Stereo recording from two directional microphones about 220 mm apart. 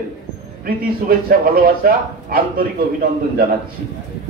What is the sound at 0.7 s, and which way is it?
Speech, 40° right (ahead or behind).